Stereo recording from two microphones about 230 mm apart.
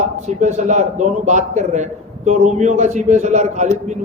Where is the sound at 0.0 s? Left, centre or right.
Right.